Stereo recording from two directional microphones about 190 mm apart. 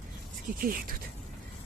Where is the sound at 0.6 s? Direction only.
50° right (ahead or behind).